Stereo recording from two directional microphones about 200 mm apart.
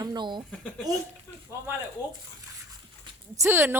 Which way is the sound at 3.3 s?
15° right (ahead or behind).